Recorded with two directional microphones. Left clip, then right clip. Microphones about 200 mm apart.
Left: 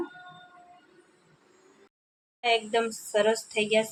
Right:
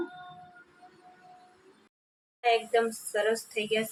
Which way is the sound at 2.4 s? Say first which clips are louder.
Even; 20° left (ahead or behind).